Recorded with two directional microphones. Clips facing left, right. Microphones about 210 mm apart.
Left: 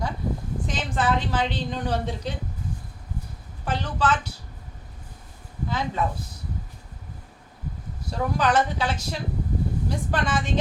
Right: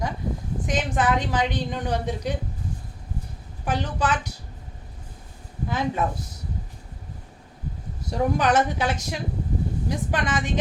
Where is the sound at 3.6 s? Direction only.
15° right (ahead or behind).